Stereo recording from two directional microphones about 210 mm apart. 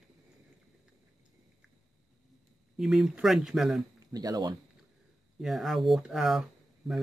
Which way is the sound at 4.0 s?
15° right (ahead or behind).